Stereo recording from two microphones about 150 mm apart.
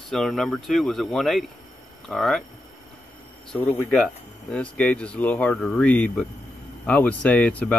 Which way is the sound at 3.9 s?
5° left (ahead or behind).